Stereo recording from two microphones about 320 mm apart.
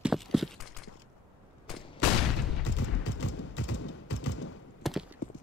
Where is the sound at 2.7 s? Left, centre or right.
Left.